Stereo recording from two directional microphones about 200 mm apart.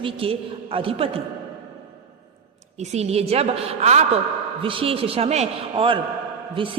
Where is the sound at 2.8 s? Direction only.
35° right (ahead or behind).